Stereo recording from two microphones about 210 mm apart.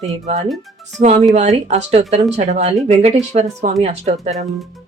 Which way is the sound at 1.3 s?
30° right (ahead or behind).